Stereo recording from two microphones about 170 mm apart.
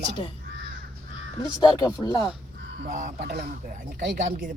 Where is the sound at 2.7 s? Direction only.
55° right (ahead or behind).